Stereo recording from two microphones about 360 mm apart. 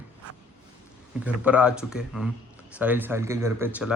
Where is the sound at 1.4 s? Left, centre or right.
Centre.